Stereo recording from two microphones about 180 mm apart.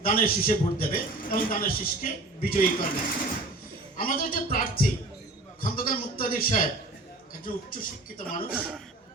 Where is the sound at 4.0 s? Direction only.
50° left (ahead or behind).